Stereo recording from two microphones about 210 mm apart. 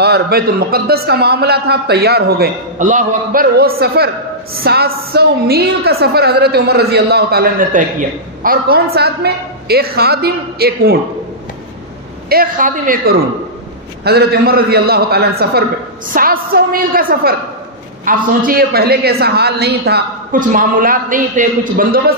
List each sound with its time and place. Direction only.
0.0 s a woman's voice: 50° right (ahead or behind)
12.3 s a woman's voice: 45° right (ahead or behind)